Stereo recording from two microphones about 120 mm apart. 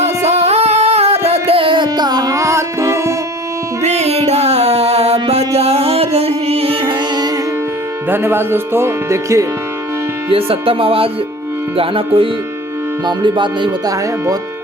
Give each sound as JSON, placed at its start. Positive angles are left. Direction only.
{"t": 0.3, "sound": "music", "side_deg": -60}
{"t": 3.8, "sound": "music", "side_deg": -65}
{"t": 8.1, "sound": "speech", "side_deg": -20}
{"t": 10.2, "sound": "speech", "side_deg": -50}